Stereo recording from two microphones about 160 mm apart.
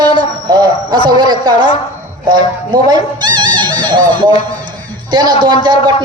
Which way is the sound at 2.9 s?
30° right (ahead or behind).